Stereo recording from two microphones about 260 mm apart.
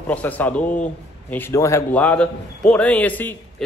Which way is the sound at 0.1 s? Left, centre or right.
Centre.